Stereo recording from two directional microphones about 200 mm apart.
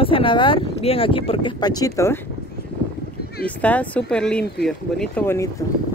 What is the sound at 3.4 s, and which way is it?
Speech, 5° left (ahead or behind).